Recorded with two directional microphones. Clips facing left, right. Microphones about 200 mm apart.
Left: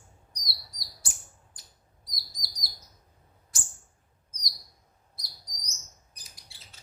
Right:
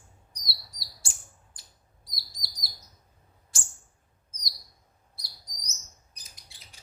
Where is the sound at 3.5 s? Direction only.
30° right (ahead or behind).